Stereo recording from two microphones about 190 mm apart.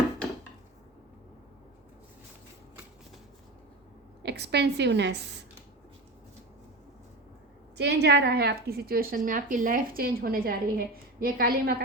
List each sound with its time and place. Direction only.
4.2 s a woman's voice: 60° right (ahead or behind)
7.8 s a woman's voice: 60° right (ahead or behind)